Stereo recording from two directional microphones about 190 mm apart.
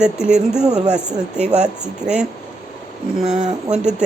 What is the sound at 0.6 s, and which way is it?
Speech, 35° right (ahead or behind).